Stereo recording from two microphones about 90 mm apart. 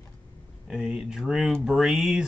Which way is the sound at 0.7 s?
5° right (ahead or behind).